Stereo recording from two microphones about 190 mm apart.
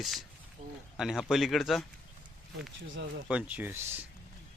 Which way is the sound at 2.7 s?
75° right (ahead or behind).